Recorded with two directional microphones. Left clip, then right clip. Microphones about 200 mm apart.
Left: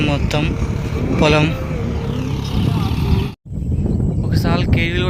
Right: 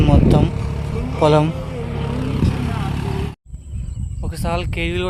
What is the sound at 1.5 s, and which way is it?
Music, 35° left (ahead or behind).